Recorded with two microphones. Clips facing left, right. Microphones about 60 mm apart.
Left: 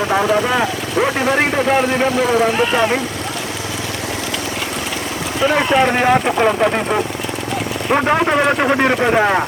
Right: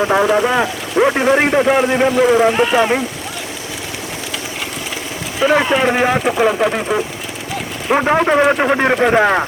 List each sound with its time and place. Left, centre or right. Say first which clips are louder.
0.0 s speech: right 2 dB; centre
5.4 s speech: right 1 dB; centre